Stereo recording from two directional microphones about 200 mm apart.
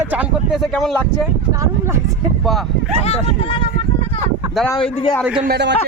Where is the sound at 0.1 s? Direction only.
5° right (ahead or behind).